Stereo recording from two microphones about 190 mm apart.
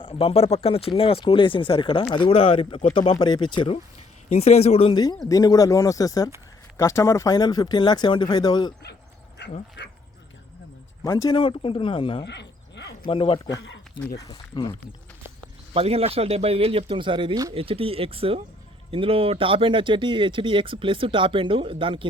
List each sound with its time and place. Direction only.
0.0 s speech: 30° left (ahead or behind)
9.4 s speech: 65° left (ahead or behind)
11.0 s speech: 20° left (ahead or behind)
12.2 s a sound: 65° left (ahead or behind)
13.1 s speech: 25° left (ahead or behind)
15.7 s speech: 30° right (ahead or behind)